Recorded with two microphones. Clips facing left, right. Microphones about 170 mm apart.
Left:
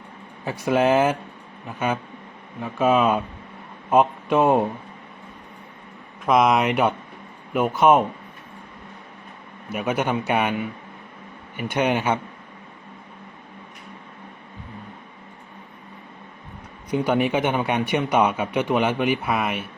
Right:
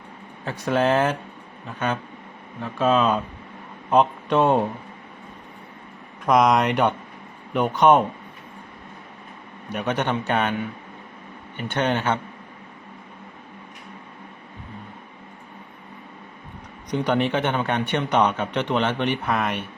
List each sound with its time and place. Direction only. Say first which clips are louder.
0.4 s speech: left 2 dB; 10° left (ahead or behind)
6.2 s speech: even; 5° left (ahead or behind)
9.6 s speech: left 1 dB; 10° left (ahead or behind)
16.9 s speech: left 1 dB; 10° left (ahead or behind)